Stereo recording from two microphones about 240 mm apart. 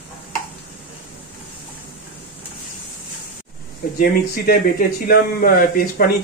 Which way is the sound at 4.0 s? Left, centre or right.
Left.